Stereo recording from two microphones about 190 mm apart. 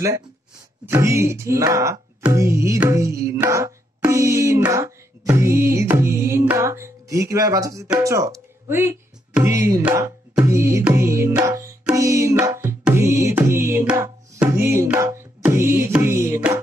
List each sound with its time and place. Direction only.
0.8 s music: 15° right (ahead or behind)
8.0 s speech: 15° right (ahead or behind)
8.6 s music: 10° right (ahead or behind)